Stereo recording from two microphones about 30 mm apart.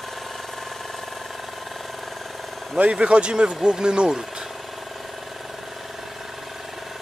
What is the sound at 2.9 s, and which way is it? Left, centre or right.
Speech, right.